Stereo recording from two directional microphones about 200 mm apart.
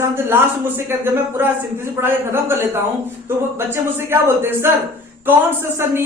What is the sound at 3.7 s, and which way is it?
Speech, 10° right (ahead or behind).